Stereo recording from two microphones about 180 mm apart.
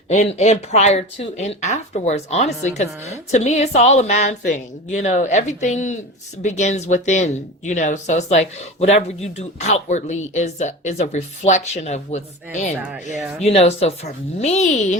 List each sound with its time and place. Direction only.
0.3 s speech: 40° left (ahead or behind)